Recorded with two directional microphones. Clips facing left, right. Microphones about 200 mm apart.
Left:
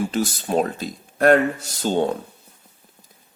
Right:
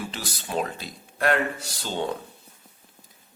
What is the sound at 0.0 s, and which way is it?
Speech, 45° left (ahead or behind).